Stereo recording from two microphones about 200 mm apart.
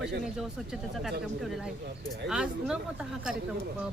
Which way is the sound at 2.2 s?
5° right (ahead or behind).